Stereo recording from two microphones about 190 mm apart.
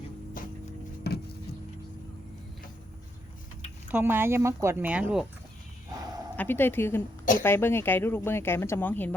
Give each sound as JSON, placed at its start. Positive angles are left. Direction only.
{"t": 1.1, "sound": "music", "side_deg": 60}
{"t": 3.9, "sound": "speech", "side_deg": -10}
{"t": 6.3, "sound": "speech", "side_deg": 10}